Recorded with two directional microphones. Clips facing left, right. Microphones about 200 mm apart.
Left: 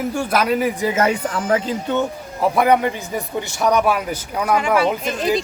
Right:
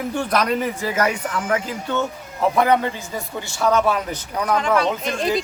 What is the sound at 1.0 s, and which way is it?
Speech, 35° left (ahead or behind).